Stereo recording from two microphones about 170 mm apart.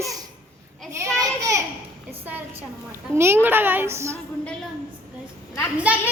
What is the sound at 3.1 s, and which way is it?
A child's voice, 15° right (ahead or behind).